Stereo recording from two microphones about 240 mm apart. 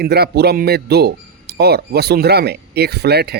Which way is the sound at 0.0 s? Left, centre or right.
Right.